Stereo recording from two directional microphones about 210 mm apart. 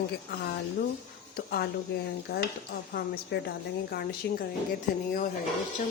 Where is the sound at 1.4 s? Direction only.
45° left (ahead or behind).